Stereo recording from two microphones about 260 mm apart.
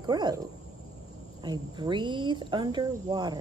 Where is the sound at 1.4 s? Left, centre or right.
Centre.